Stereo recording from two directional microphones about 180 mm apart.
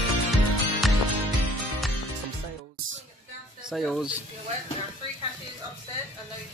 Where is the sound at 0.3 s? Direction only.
Centre (ahead or behind).